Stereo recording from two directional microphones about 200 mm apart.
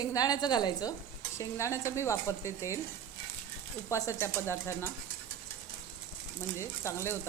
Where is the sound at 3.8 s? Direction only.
15° left (ahead or behind).